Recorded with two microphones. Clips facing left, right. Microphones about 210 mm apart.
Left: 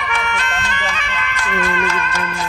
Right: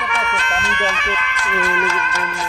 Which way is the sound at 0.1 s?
70° left (ahead or behind).